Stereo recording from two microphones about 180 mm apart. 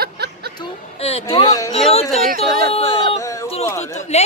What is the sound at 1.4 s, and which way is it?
Speech, 20° left (ahead or behind).